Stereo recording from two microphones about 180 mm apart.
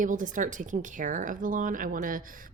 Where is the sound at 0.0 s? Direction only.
45° right (ahead or behind).